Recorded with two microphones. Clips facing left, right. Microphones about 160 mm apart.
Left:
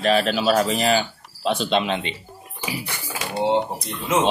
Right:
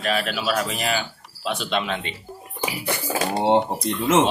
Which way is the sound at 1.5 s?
25° left (ahead or behind).